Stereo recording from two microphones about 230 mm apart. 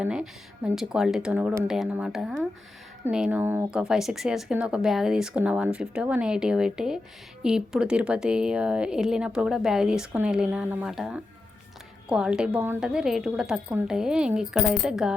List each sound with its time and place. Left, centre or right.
0.0 s speech: centre